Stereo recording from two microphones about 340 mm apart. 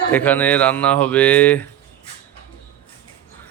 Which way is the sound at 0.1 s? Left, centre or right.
Centre.